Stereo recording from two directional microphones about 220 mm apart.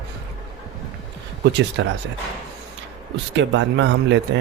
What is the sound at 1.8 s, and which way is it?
Speech, 55° right (ahead or behind).